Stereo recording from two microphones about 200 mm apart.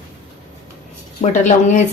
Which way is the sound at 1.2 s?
35° left (ahead or behind).